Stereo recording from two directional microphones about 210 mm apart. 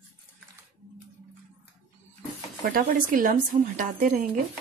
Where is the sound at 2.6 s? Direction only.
45° right (ahead or behind).